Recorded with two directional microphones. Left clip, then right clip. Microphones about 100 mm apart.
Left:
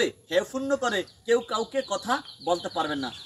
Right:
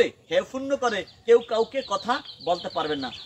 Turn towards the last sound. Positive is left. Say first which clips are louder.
# right 1 dB
turn(degrees=15)  # may be behind; listen again after turning